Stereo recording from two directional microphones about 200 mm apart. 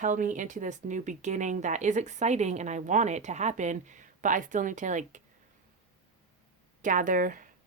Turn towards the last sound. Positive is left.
turn(degrees=-40)  # may be behind; listen again after turning